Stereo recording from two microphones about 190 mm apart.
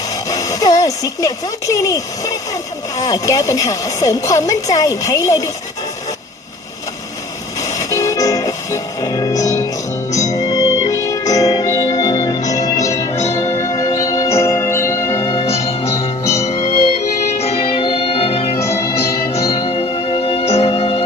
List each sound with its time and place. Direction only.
0.3 s a woman's voice: 15° left (ahead or behind)
7.8 s music: 15° left (ahead or behind)
15.4 s music: 30° left (ahead or behind)
18.6 s music: 15° left (ahead or behind)
19.4 s music: 30° left (ahead or behind)